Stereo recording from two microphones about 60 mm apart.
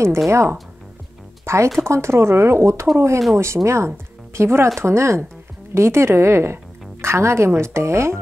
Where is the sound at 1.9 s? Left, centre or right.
Right.